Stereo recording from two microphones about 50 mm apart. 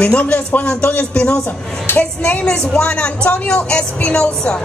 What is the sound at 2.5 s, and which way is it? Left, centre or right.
Speech, centre.